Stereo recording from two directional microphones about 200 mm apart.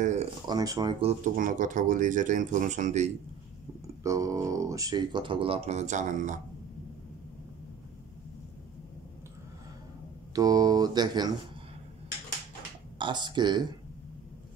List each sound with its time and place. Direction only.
0.0 s a sound: 35° right (ahead or behind)
0.5 s speech: 20° right (ahead or behind)
1.0 s speech: 40° right (ahead or behind)
4.0 s speech: 15° right (ahead or behind); by 6.4 s 40° right (ahead or behind)
10.3 s speech: 20° right (ahead or behind)
13.0 s speech: 20° right (ahead or behind)